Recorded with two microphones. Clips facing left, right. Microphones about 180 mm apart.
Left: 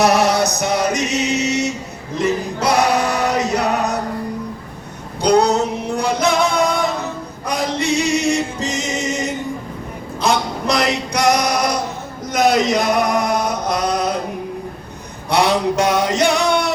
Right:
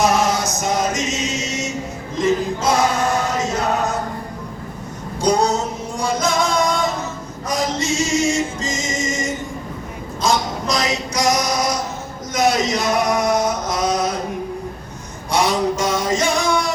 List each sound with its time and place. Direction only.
0.0 s male singing: 70° left (ahead or behind)
2.1 s choir: 65° left (ahead or behind)
5.2 s music: 65° left (ahead or behind)
10.2 s a sound: 60° left (ahead or behind)
12.3 s male singing: 60° left (ahead or behind)
15.3 s male singing: 65° left (ahead or behind)